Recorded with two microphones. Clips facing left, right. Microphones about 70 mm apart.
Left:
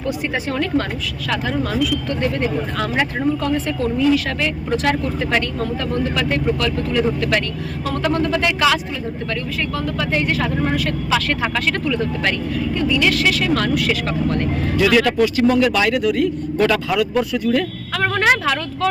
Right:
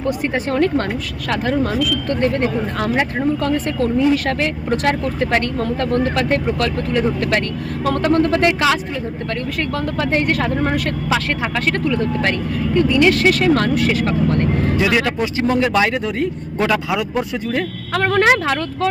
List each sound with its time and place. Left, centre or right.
0.0 s speech: right
2.9 s speech: centre
3.4 s speech: right
7.2 s speech: right
7.9 s speech: right
11.1 s speech: right
16.6 s speech: centre